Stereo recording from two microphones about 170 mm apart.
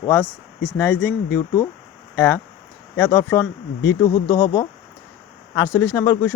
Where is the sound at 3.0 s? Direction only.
20° left (ahead or behind).